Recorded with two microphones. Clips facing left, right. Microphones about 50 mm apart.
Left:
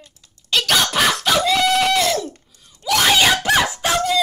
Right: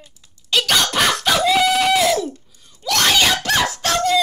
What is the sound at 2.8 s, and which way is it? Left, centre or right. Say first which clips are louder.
Wail: left 1 dB; centre.